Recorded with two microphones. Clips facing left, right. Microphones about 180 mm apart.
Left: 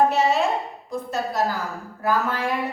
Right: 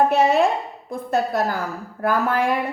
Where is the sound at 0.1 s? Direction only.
55° right (ahead or behind).